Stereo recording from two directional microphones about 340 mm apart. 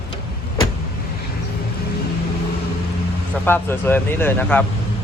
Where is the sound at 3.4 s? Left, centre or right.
Centre.